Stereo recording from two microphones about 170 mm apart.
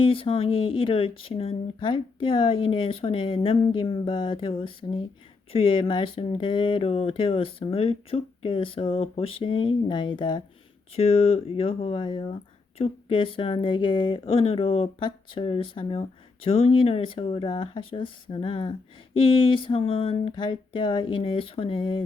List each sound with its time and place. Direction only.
0.0 s speech: 30° left (ahead or behind)